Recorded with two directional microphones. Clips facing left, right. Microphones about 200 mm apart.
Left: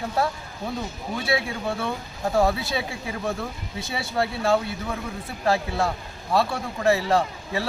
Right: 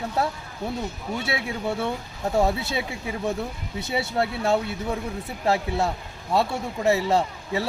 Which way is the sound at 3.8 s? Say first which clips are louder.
Right 1 dB; 20° right (ahead or behind).